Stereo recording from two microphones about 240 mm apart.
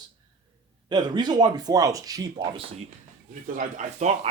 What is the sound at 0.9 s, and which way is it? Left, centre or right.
Speech, centre.